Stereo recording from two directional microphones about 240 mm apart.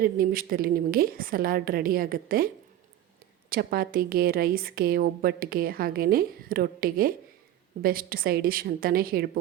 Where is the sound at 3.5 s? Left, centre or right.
Right.